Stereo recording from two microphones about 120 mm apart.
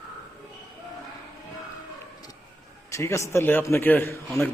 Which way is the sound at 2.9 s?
25° left (ahead or behind).